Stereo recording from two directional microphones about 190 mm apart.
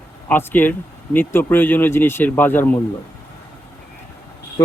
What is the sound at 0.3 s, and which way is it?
Speech, 10° left (ahead or behind).